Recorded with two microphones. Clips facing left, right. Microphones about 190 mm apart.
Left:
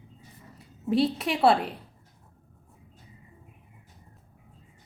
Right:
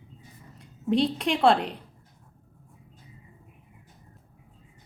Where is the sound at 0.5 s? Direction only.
5° left (ahead or behind).